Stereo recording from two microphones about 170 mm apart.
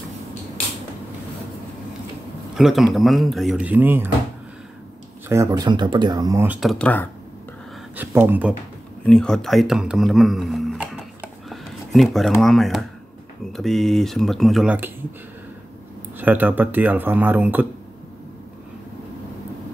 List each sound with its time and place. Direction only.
2.5 s speech: centre (ahead or behind)
5.3 s speech: 20° right (ahead or behind); by 7.1 s 10° left (ahead or behind)
7.9 s speech: 10° right (ahead or behind)
9.0 s speech: 5° left (ahead or behind)
16.2 s speech: 10° right (ahead or behind)